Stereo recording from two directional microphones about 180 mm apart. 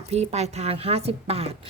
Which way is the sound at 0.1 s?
35° right (ahead or behind).